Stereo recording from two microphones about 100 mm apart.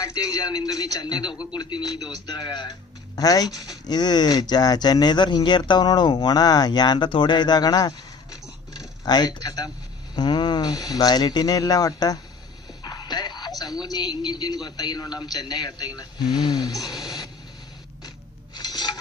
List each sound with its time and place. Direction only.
0.0 s speech: 40° left (ahead or behind)
1.3 s speech: 10° right (ahead or behind)
1.5 s speech: 40° left (ahead or behind)
12.8 s a sound: 45° left (ahead or behind)
13.8 s speech: 45° left (ahead or behind)
18.5 s filing: 45° left (ahead or behind)